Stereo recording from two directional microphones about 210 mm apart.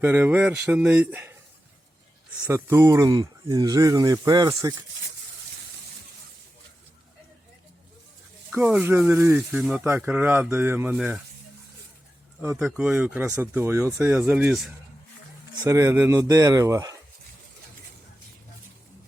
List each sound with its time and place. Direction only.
0.0 s speech: 10° right (ahead or behind)
2.4 s speech: 15° right (ahead or behind)
8.6 s speech: 5° right (ahead or behind)
12.4 s speech: 5° right (ahead or behind)
15.5 s speech: 15° right (ahead or behind)